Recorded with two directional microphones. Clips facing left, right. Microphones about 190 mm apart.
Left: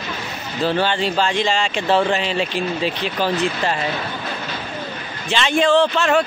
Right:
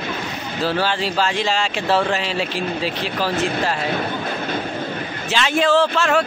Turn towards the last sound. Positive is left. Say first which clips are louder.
# left 1 dB
turn(degrees=0)  # may be behind; listen again after turning